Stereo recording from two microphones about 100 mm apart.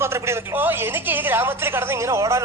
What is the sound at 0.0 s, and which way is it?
A man's voice, 25° right (ahead or behind).